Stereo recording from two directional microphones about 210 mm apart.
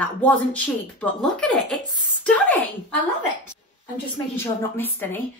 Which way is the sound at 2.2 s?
5° left (ahead or behind).